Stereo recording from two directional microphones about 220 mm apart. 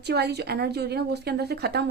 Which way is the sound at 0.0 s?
50° right (ahead or behind).